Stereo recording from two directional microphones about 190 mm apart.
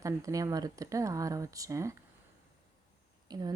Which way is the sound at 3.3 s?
20° right (ahead or behind).